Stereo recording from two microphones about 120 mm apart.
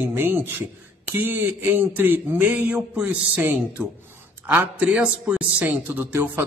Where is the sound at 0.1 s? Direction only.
20° right (ahead or behind).